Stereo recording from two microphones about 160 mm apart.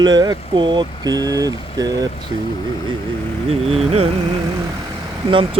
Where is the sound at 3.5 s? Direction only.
40° right (ahead or behind).